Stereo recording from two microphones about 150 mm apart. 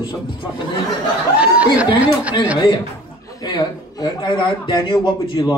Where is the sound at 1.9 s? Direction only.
10° right (ahead or behind).